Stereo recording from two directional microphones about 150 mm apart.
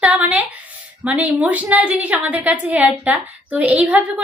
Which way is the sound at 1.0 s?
10° right (ahead or behind).